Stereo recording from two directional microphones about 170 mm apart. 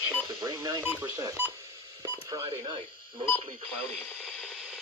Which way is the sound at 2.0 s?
20° right (ahead or behind).